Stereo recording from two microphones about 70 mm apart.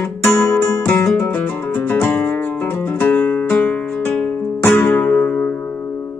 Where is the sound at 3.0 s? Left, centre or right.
Left.